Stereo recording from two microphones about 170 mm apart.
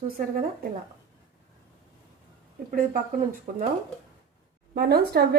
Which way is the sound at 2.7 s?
55° right (ahead or behind).